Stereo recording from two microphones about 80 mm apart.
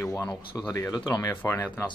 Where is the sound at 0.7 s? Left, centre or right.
Left.